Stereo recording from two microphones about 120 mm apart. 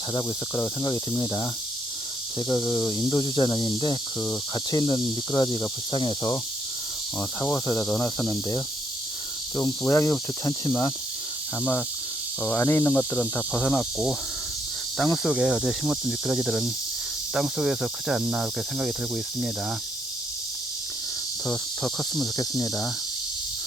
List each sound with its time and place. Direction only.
0.1 s insect: 30° left (ahead or behind)
2.5 s insect: 35° left (ahead or behind)
7.4 s cricket: 20° left (ahead or behind)
12.5 s insect: 20° left (ahead or behind)
14.9 s speech: 5° left (ahead or behind)
22.4 s insect: 30° left (ahead or behind)